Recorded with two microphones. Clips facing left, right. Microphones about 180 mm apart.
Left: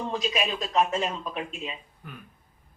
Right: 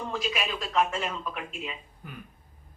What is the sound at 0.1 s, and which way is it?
Speech, 20° left (ahead or behind).